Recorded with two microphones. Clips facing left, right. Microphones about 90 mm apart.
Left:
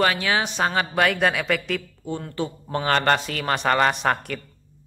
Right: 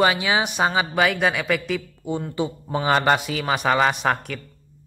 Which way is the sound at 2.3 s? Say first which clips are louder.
Right 2 dB; 15° right (ahead or behind).